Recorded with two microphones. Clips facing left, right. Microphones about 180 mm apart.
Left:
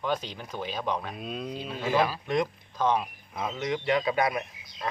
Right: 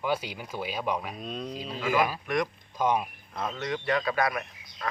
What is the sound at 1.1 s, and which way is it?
Speech, 5° left (ahead or behind).